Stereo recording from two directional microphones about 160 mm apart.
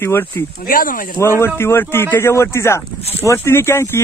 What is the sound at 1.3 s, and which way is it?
Speech, 15° left (ahead or behind).